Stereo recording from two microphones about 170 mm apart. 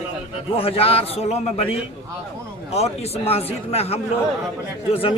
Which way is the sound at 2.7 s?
35° left (ahead or behind).